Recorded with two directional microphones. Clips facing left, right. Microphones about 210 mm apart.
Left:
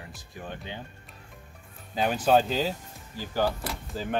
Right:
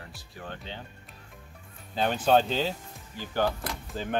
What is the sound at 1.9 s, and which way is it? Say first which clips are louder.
Speech: left 1 dB; 5° left (ahead or behind).